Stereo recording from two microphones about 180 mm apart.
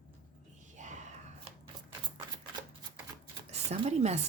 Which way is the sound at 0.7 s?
40° right (ahead or behind).